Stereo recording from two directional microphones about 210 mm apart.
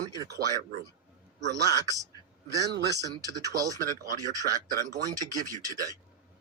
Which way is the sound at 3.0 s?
15° right (ahead or behind).